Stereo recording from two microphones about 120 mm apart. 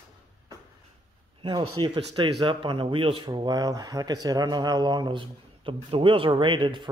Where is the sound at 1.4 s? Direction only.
40° right (ahead or behind).